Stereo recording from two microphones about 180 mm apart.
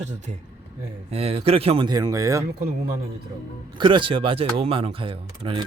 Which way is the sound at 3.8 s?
25° right (ahead or behind).